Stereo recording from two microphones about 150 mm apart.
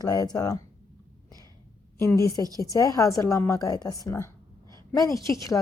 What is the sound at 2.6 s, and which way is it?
Speech, 25° left (ahead or behind).